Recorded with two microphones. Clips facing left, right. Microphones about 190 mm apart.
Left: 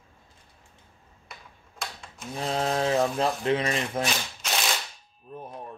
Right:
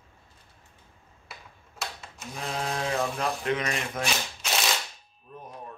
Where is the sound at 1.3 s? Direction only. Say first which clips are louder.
Even; 5° right (ahead or behind).